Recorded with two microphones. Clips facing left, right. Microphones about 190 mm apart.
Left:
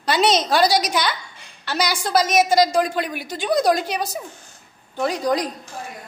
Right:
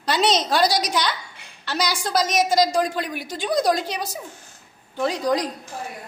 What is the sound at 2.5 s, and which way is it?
A woman's voice, 60° left (ahead or behind).